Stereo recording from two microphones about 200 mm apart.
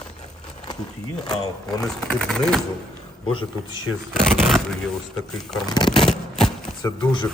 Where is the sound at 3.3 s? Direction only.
25° left (ahead or behind).